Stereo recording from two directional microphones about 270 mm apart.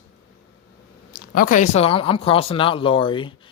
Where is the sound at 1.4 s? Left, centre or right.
Left.